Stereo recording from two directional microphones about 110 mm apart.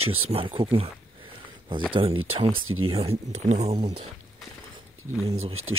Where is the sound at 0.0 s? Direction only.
60° right (ahead or behind); by 3.9 s 80° right.